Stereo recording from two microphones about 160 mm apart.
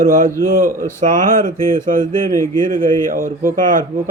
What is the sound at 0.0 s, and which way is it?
Speech, 60° right (ahead or behind).